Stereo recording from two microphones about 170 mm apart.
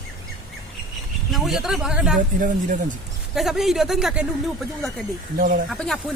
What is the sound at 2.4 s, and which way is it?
Speech, 50° right (ahead or behind).